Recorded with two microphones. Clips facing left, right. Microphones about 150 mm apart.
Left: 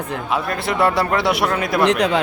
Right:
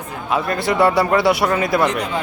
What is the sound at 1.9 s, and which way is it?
Speech, 75° left (ahead or behind).